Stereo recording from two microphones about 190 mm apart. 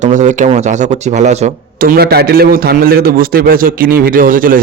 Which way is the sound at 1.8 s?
55° right (ahead or behind).